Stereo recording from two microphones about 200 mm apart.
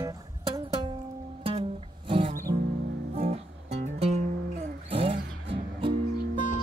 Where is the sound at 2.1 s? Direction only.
30° right (ahead or behind).